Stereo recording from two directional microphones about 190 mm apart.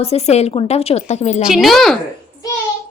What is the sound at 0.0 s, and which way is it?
A woman's voice, 35° left (ahead or behind).